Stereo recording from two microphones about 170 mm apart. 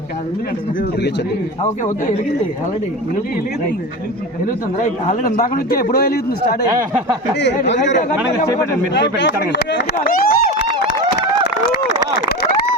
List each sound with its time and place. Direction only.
4.8 s a man's voice: 50° left (ahead or behind)
7.8 s speech: 50° left (ahead or behind)
8.9 s speech: 90° left
10.1 s speech: 60° left (ahead or behind)